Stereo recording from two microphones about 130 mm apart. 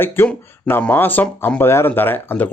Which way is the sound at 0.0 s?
15° left (ahead or behind).